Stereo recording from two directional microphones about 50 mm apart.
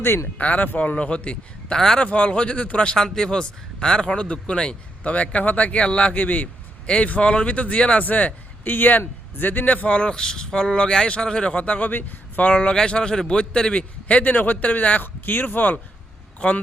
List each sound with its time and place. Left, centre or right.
0.3 s a man's voice: left
2.9 s a man's voice: centre
8.0 s a man's voice: left